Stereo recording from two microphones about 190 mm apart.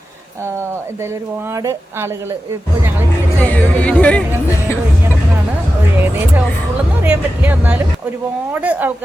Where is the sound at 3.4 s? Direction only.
10° left (ahead or behind).